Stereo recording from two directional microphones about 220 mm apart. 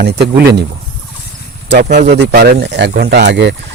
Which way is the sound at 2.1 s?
50° right (ahead or behind).